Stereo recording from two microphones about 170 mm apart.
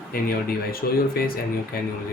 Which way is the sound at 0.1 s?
60° left (ahead or behind).